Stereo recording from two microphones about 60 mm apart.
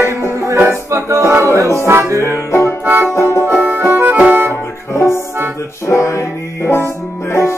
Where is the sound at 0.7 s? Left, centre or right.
Right.